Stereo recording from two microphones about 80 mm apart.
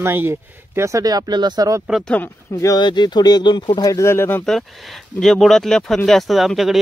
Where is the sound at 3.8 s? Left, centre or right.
Left.